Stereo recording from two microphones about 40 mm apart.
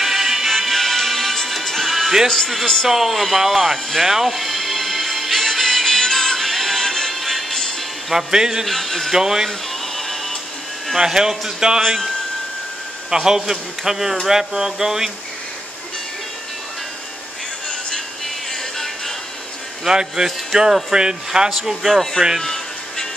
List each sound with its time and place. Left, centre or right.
0.0 s music: centre
1.9 s music: centre
2.2 s speech: centre
2.9 s music: centre
7.2 s music: centre
8.1 s speech: centre
8.6 s speech: centre
9.1 s speech: centre
9.5 s music: centre
11.0 s speech: centre
13.1 s speech: centre
19.9 s speech: centre
22.4 s music: centre